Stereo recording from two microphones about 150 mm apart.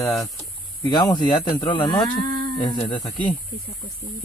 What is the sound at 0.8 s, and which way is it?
Speech, 25° left (ahead or behind).